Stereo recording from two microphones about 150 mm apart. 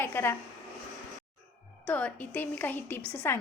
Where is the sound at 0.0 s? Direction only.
15° left (ahead or behind).